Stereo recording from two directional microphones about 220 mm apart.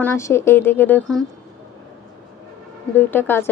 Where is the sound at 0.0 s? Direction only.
10° left (ahead or behind).